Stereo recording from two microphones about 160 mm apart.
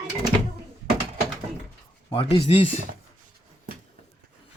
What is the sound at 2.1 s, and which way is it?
Speech, 35° left (ahead or behind).